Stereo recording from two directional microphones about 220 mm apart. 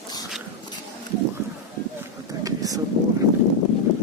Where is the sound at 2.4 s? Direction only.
15° right (ahead or behind).